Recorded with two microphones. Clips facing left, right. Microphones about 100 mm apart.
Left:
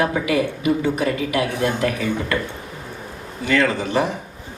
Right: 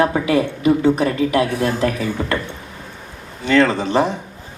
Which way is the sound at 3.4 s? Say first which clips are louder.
Right 4 dB; 25° right (ahead or behind).